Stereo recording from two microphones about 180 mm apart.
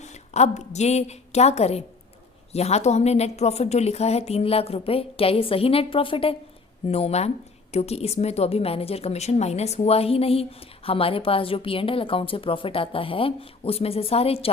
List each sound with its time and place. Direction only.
0.0 s a woman's voice: 40° left (ahead or behind)